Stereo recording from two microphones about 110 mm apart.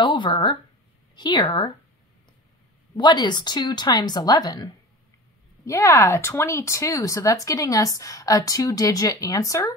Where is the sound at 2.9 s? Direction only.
45° left (ahead or behind).